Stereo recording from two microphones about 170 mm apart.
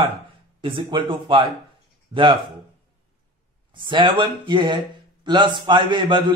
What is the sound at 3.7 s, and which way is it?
Speech, 30° right (ahead or behind).